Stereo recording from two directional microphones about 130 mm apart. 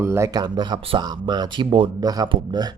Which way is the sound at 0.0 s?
20° right (ahead or behind).